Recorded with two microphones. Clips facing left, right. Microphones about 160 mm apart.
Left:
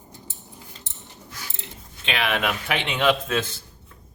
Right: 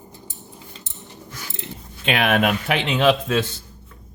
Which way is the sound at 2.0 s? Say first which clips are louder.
Right 6 dB; 45° right (ahead or behind).